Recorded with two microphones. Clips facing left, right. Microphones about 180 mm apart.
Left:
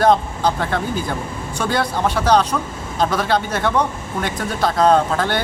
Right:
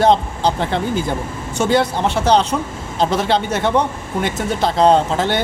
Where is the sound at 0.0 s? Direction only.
25° right (ahead or behind).